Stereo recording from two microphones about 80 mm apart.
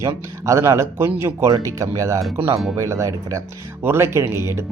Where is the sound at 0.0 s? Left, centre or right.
Right.